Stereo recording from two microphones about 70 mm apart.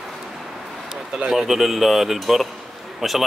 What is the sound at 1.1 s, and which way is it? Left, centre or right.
Speech, centre.